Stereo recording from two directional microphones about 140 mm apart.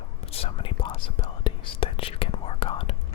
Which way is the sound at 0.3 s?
45° left (ahead or behind).